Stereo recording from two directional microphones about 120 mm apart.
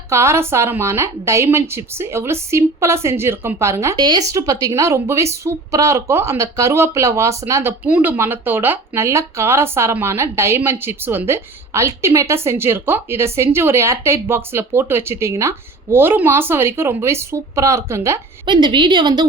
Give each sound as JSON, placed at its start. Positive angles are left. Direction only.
{"t": 0.1, "sound": "speech", "side_deg": -25}
{"t": 3.9, "sound": "a woman's voice", "side_deg": -35}
{"t": 7.9, "sound": "speech", "side_deg": -10}
{"t": 18.4, "sound": "a woman's voice", "side_deg": -40}